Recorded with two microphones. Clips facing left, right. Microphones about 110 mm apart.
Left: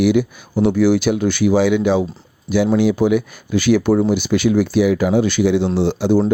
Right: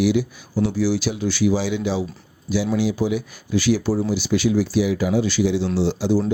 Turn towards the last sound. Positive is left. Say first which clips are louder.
# left 4 dB
turn(degrees=60)  # may be behind; listen again after turning